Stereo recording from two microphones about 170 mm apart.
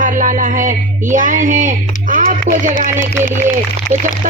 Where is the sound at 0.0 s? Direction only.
50° right (ahead or behind).